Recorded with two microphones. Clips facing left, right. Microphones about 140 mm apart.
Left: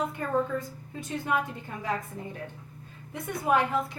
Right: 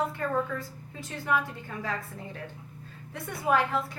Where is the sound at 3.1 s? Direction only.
20° left (ahead or behind).